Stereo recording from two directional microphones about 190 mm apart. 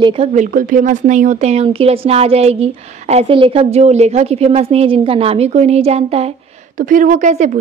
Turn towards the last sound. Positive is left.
turn(degrees=-40)  # may be behind; listen again after turning